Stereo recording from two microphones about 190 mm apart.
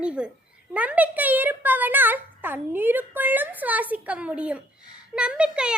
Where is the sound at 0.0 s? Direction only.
5° right (ahead or behind).